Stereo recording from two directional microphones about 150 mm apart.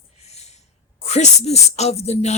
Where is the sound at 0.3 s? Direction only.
45° left (ahead or behind).